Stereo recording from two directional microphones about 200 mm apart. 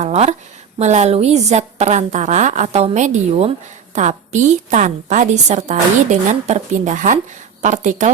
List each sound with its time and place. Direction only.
0.0 s a woman's voice: 35° right (ahead or behind)